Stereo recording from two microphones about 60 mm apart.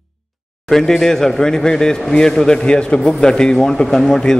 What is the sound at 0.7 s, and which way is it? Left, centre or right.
A man's voice, centre.